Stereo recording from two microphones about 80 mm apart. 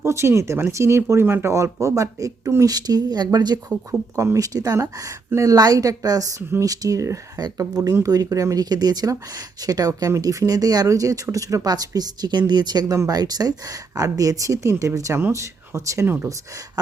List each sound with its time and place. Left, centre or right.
0.0 s speech: right
4.1 s speech: right